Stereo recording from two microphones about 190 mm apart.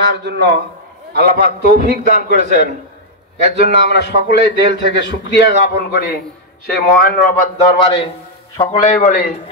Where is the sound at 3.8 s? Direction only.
60° left (ahead or behind).